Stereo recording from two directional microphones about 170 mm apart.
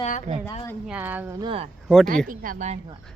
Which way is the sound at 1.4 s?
30° right (ahead or behind).